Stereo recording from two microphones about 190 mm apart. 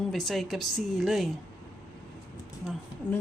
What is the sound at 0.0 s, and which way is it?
A woman's voice, centre (ahead or behind).